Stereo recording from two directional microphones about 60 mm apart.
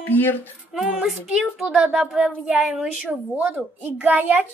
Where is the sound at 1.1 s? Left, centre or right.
Centre.